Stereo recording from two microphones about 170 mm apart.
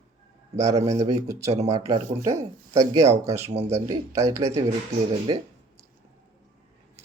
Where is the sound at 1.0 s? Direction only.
20° right (ahead or behind).